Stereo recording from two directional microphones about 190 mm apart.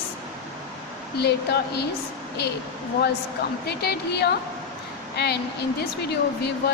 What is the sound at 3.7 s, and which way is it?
A woman's voice, 60° left (ahead or behind).